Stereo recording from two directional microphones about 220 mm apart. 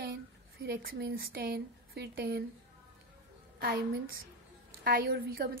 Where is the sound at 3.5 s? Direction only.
40° right (ahead or behind).